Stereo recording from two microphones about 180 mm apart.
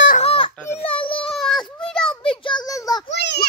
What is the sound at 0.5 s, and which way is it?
Speech, 15° left (ahead or behind).